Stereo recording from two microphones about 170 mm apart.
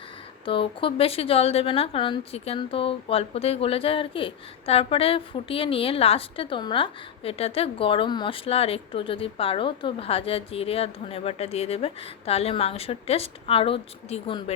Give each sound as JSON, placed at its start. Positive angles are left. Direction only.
{"t": 0.4, "sound": "a woman's voice", "side_deg": 30}